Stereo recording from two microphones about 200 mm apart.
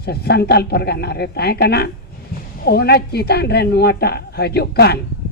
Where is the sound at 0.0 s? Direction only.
55° left (ahead or behind).